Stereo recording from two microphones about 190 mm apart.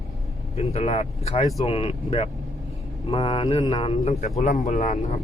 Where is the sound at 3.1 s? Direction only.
30° left (ahead or behind).